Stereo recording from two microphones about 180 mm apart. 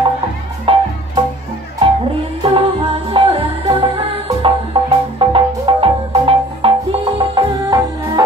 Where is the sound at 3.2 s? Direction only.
30° right (ahead or behind).